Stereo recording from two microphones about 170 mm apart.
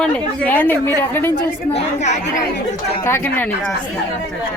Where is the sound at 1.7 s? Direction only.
45° left (ahead or behind).